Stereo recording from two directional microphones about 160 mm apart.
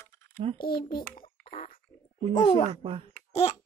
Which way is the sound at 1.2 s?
40° left (ahead or behind).